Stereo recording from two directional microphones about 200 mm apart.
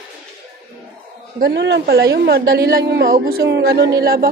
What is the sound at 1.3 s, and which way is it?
A woman's voice, 55° right (ahead or behind).